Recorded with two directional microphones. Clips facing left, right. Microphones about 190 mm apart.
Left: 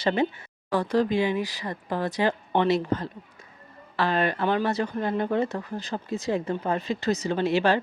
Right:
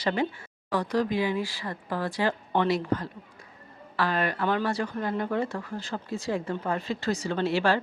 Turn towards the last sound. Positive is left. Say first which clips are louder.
# left 2 dB
turn(degrees=20)  # may be behind; listen again after turning